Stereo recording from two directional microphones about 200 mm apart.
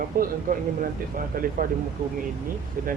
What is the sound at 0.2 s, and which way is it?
Speech, 45° right (ahead or behind).